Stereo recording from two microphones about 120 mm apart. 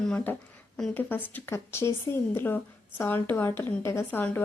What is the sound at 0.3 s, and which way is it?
A woman's voice, 15° left (ahead or behind).